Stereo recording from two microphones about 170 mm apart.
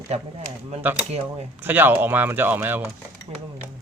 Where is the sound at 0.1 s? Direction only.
40° right (ahead or behind).